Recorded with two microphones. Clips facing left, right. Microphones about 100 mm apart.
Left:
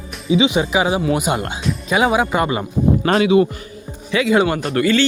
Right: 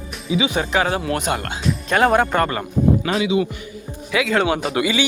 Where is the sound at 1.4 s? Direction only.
20° left (ahead or behind).